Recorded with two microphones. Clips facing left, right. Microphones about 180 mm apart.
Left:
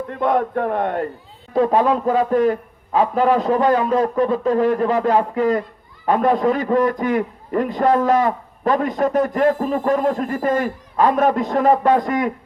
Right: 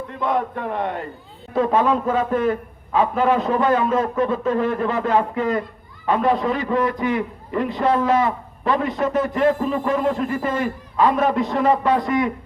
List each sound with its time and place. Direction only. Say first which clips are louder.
0.1 s a man's voice: left 4 dB; 50° left (ahead or behind)
1.5 s a man's voice: left 2 dB; 40° left (ahead or behind)